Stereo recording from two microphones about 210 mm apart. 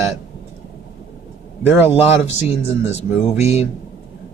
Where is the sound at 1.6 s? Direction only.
10° right (ahead or behind).